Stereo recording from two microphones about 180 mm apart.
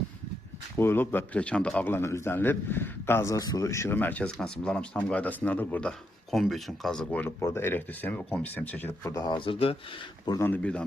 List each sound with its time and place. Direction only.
0.8 s speech: 10° left (ahead or behind)